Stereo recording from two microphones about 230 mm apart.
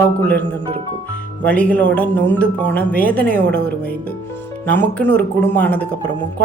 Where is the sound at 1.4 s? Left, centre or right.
Centre.